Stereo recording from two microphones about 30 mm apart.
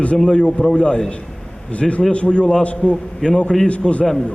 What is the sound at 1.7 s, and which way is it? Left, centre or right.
A man's voice, left.